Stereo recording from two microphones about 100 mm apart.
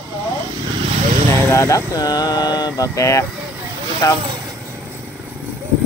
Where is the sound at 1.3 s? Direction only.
25° left (ahead or behind).